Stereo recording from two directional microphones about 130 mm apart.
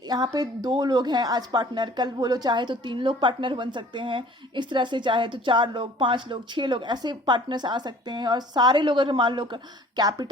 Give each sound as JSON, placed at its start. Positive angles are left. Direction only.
{"t": 0.1, "sound": "a woman's voice", "side_deg": -30}